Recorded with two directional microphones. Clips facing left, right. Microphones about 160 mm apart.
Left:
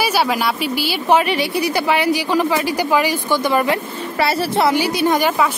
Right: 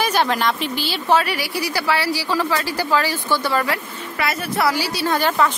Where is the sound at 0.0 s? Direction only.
10° left (ahead or behind).